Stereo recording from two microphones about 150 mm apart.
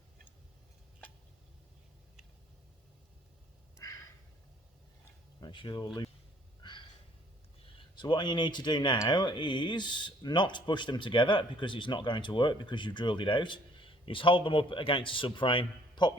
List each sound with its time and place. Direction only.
3.8 s a sound: 20° left (ahead or behind)
5.4 s speech: 30° left (ahead or behind)
6.6 s snort: 30° left (ahead or behind)
7.8 s speech: 30° left (ahead or behind)